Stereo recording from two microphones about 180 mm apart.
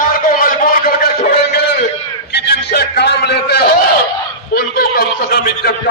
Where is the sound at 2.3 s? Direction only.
65° left (ahead or behind).